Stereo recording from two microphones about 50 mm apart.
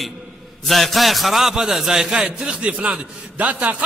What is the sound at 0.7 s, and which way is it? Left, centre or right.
A man's voice, centre.